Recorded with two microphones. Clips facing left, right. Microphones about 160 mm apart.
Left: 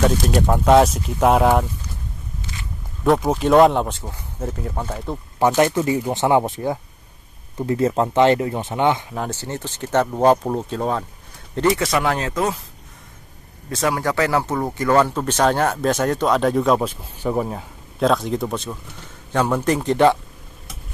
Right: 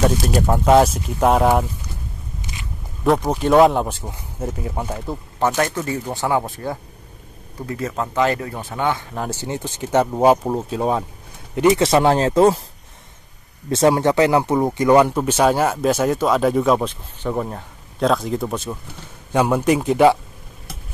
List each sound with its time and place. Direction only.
0.1 s speech: 5° right (ahead or behind)
3.0 s speech: centre (ahead or behind)
4.0 s speech: 10° right (ahead or behind)
5.6 s speech: 15° left (ahead or behind)
9.3 s speech: 15° right (ahead or behind)
11.7 s speech: 30° right (ahead or behind)
13.7 s speech: 25° right (ahead or behind); by 20.2 s 10° right (ahead or behind)